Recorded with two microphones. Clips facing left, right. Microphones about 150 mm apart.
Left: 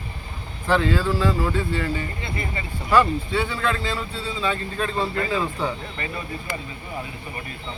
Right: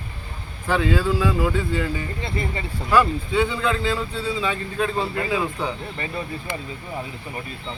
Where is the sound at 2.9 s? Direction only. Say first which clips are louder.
Even; 10° right (ahead or behind).